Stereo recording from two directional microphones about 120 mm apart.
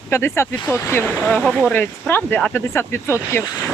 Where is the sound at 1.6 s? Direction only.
15° left (ahead or behind).